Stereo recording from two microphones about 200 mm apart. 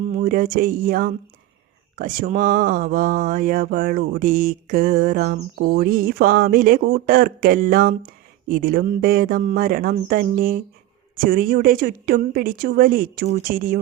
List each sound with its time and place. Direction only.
0.0 s speech: 40° right (ahead or behind)
2.0 s mantra: 40° right (ahead or behind)